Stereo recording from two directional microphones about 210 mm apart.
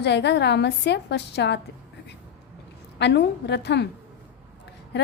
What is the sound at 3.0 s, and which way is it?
A woman's voice, 55° left (ahead or behind).